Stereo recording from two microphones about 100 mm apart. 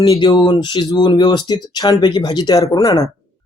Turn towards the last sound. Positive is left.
turn(degrees=40)  # may be behind; listen again after turning